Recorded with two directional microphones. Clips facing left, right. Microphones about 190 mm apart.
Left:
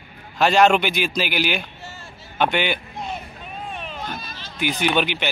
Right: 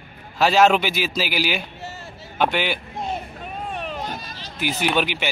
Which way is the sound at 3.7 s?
45° right (ahead or behind).